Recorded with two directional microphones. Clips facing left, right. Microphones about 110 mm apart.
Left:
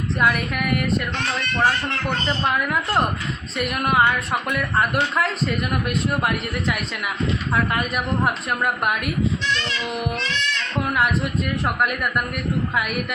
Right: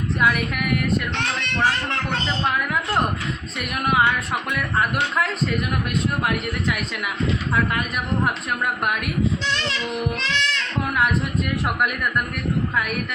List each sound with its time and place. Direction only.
0.2 s a man's voice: centre (ahead or behind)
3.6 s a man's voice: centre (ahead or behind)
7.5 s a man's voice: 5° left (ahead or behind)
10.2 s speech: 90° right
10.9 s a man's voice: centre (ahead or behind)